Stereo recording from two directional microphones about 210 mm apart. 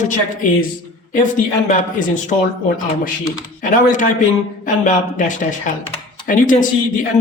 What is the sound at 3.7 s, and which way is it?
Speech, 40° left (ahead or behind).